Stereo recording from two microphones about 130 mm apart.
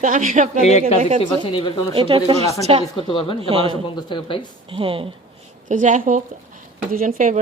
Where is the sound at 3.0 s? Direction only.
40° left (ahead or behind).